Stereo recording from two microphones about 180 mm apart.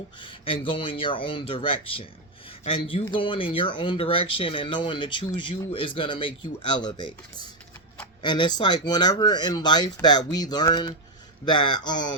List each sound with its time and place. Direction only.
0.3 s speech: 30° left (ahead or behind)
8.2 s speech: 25° left (ahead or behind)